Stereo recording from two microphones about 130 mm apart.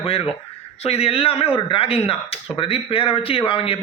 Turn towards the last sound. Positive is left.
turn(degrees=45)  # may be behind; listen again after turning